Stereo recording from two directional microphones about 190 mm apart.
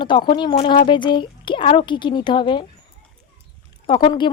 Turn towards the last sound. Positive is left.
turn(degrees=25)  # may be behind; listen again after turning